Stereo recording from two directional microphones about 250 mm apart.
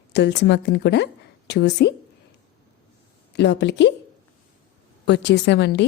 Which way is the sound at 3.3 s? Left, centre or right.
Left.